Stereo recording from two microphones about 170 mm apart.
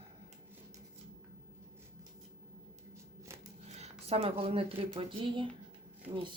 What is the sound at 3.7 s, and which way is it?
Speech, 40° right (ahead or behind).